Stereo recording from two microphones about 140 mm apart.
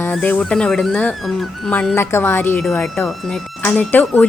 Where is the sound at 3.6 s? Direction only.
10° left (ahead or behind).